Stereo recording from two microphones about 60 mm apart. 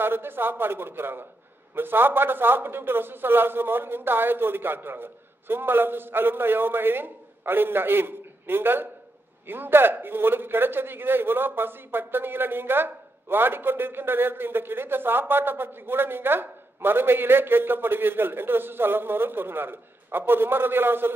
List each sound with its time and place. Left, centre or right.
0.0 s a man's voice: right